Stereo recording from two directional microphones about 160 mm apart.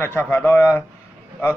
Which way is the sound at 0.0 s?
15° left (ahead or behind).